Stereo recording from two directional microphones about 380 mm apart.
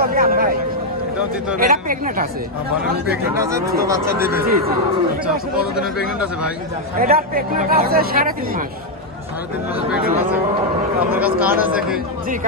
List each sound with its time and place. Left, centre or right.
0.0 s a sound: right
1.6 s speech: right
3.3 s speech: centre
5.8 s speech: centre
7.0 s speech: right
11.1 s speech: centre